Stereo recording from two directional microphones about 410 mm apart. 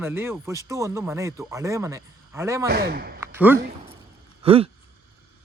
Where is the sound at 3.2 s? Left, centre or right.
Centre.